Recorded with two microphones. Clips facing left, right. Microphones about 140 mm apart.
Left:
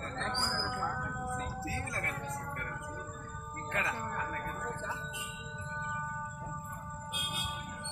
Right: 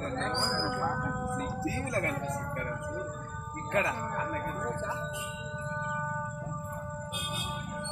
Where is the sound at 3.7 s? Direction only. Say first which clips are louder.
Right 6 dB; 25° right (ahead or behind).